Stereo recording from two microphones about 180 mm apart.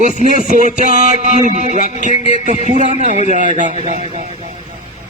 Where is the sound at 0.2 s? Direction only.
45° right (ahead or behind).